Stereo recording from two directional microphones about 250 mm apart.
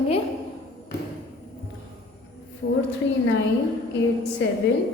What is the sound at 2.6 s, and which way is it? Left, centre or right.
Speech, left.